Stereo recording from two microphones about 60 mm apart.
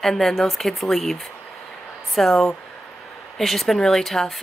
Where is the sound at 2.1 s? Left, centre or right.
Centre.